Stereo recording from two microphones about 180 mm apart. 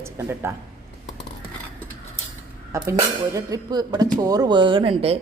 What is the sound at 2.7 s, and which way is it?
Speech, 20° right (ahead or behind).